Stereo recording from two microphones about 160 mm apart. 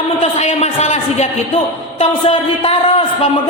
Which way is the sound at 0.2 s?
40° left (ahead or behind).